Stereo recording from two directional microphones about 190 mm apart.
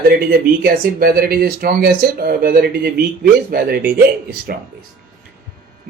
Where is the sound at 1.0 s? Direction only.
50° right (ahead or behind).